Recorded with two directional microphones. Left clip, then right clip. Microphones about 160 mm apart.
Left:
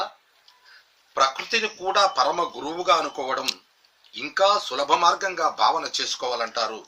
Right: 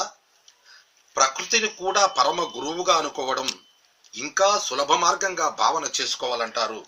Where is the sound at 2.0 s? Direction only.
5° left (ahead or behind).